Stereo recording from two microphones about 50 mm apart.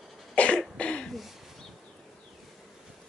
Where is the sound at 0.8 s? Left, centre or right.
Left.